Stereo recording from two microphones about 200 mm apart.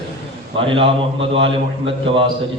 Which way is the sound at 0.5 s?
25° right (ahead or behind).